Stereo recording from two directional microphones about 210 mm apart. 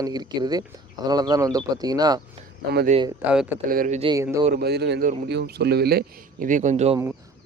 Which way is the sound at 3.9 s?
25° right (ahead or behind).